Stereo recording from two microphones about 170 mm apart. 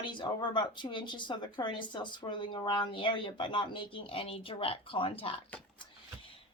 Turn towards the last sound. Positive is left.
turn(degrees=30)  # may be behind; listen again after turning